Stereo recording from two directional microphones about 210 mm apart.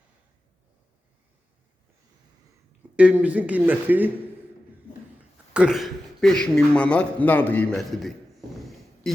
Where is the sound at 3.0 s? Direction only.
5° right (ahead or behind).